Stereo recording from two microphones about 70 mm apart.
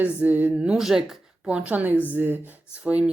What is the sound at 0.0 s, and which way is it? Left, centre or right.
Speech, right.